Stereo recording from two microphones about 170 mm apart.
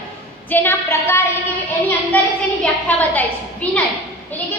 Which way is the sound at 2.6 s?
10° left (ahead or behind).